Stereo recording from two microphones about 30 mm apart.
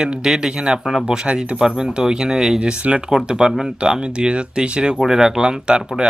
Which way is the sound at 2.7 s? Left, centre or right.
Right.